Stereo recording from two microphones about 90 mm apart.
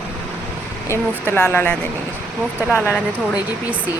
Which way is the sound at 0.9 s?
25° left (ahead or behind).